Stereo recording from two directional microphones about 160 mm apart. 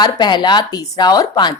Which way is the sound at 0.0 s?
25° left (ahead or behind).